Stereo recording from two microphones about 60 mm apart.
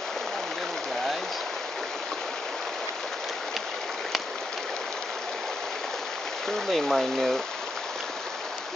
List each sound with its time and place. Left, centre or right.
6.7 s speech: centre